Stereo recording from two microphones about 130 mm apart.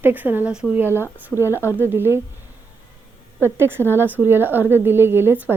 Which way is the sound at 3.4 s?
20° right (ahead or behind).